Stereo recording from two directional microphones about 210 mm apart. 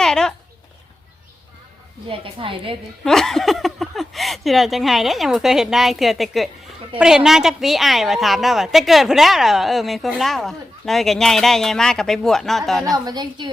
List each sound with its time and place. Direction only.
0.0 s chicken: 5° left (ahead or behind)
2.0 s a woman's voice: 25° right (ahead or behind)
3.0 s a woman's voice: centre (ahead or behind)
13.1 s a woman's voice: 20° right (ahead or behind)